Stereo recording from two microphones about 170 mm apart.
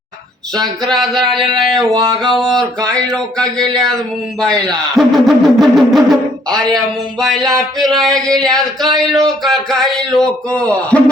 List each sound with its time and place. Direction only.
0.6 s speech: centre (ahead or behind)
1.9 s music: 25° right (ahead or behind)
2.2 s speech: 5° left (ahead or behind)